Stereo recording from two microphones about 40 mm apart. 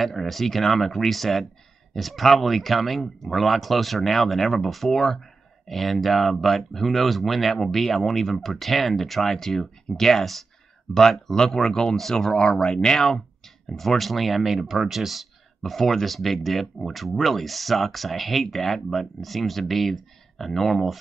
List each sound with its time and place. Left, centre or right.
0.0 s speech: centre